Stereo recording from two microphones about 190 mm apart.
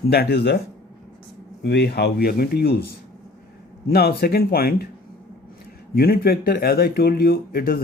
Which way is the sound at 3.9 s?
55° left (ahead or behind).